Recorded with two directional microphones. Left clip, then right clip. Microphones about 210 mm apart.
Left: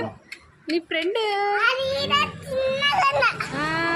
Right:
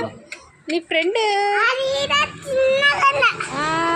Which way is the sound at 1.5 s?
15° right (ahead or behind).